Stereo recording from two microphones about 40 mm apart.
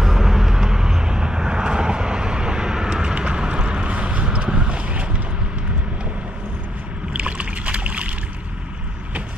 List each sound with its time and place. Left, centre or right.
0.0 s vehicle: centre; by 5.1 s right
7.2 s boat: right